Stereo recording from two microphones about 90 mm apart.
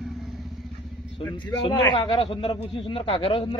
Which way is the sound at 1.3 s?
55° left (ahead or behind).